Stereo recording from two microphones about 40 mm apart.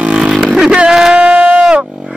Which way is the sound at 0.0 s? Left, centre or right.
Right.